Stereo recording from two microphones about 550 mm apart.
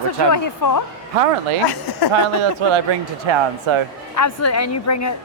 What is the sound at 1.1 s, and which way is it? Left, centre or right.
Speech, right.